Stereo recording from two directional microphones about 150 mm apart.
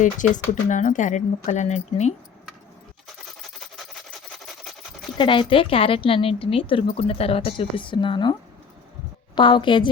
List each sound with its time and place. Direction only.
0.0 s speech: 60° left (ahead or behind)
5.1 s a woman's voice: 35° left (ahead or behind)